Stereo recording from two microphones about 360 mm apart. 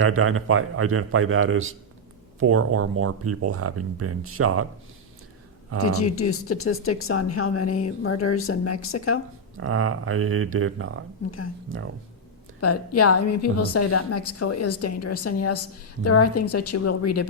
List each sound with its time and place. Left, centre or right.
0.0 s speech: right
5.7 s speech: right
6.1 s a woman's voice: left
9.6 s speech: right
12.5 s a woman's voice: left